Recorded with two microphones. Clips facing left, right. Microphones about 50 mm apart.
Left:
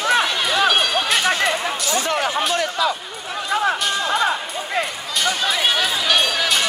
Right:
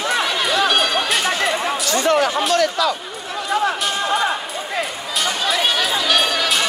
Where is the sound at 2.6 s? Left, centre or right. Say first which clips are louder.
Right 3 dB; centre.